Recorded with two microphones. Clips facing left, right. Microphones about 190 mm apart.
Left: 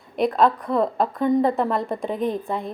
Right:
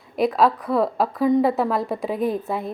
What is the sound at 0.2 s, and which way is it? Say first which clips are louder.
A woman's voice: even; centre (ahead or behind).